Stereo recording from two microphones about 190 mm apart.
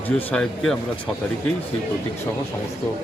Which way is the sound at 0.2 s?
5° left (ahead or behind).